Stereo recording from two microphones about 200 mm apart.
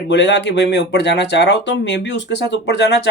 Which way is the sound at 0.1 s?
60° left (ahead or behind).